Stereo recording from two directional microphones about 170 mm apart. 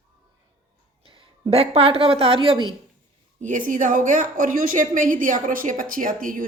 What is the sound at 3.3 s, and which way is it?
A woman's voice, 50° right (ahead or behind).